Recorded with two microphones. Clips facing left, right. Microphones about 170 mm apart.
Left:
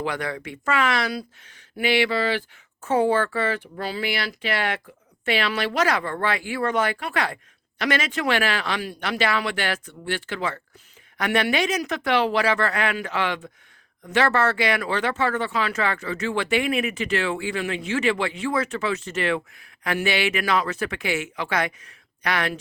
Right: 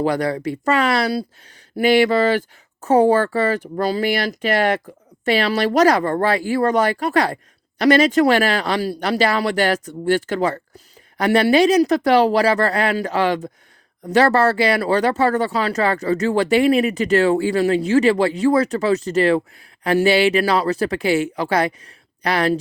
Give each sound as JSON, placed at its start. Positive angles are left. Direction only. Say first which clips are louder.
{"t": 0.0, "sound": "speech", "louder": "right 9 dB", "side_deg": -35}